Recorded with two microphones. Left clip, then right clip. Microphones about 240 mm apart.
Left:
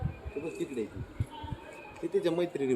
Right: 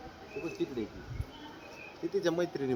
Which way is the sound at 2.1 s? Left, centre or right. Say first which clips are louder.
Left 2 dB; centre.